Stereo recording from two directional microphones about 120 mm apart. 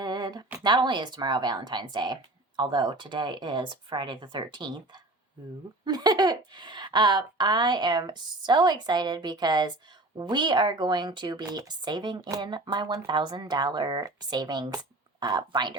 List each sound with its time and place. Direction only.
0.0 s speech: 35° right (ahead or behind)
5.8 s speech: 35° right (ahead or behind)